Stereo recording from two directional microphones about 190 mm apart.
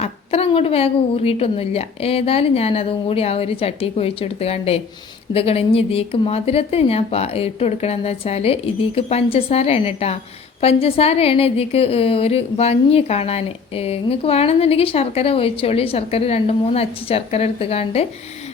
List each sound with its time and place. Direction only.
0.0 s a woman's voice: 30° left (ahead or behind)